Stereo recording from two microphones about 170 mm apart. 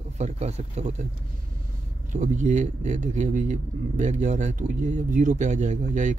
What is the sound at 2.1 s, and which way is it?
A man's voice, 45° right (ahead or behind).